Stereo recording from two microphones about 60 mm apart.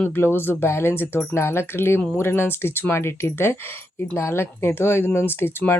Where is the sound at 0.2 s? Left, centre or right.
Left.